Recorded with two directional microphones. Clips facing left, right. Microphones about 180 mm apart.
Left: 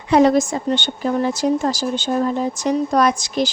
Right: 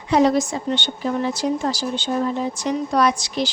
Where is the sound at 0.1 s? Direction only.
55° left (ahead or behind).